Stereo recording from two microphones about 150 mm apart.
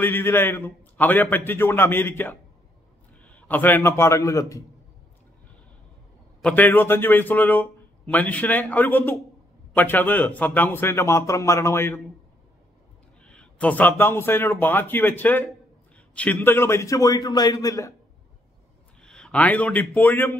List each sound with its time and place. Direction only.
0.0 s a man's voice: 15° left (ahead or behind)
6.4 s a man's voice: 10° left (ahead or behind)
13.2 s a man's voice: 5° left (ahead or behind); by 17.9 s 20° left (ahead or behind)
18.9 s a man's voice: 5° left (ahead or behind)